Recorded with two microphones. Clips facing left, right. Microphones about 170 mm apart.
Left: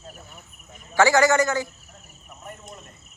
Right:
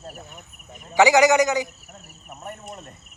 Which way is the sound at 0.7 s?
15° right (ahead or behind).